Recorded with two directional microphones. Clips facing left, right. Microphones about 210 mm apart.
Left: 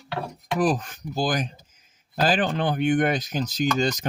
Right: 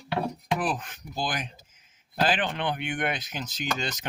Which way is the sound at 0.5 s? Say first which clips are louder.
Left 9 dB; 40° left (ahead or behind).